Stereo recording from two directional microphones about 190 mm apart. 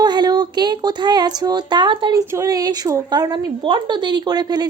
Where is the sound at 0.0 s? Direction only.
20° right (ahead or behind).